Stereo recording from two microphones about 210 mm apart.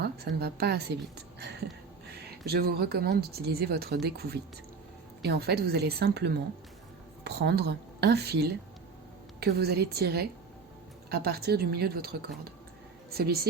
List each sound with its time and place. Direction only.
0.0 s a woman's voice: 50° right (ahead or behind)